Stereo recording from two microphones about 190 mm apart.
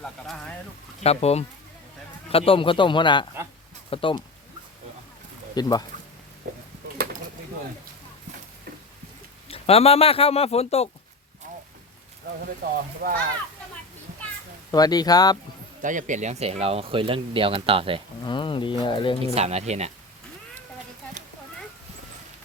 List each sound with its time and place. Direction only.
0.0 s speech: 5° left (ahead or behind)
1.0 s a man's voice: 35° left (ahead or behind)
5.5 s a man's voice: 20° left (ahead or behind)
9.5 s speech: 30° left (ahead or behind)
12.6 s speech: 60° right (ahead or behind)
14.7 s a man's voice: 20° left (ahead or behind)
15.8 s speech: 40° right (ahead or behind)
18.3 s a man's voice: 25° left (ahead or behind)
19.2 s speech: 35° right (ahead or behind)